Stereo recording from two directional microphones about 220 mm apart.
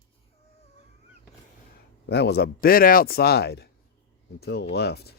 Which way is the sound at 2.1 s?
50° left (ahead or behind).